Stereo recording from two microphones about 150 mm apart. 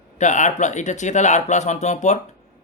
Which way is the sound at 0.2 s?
55° left (ahead or behind).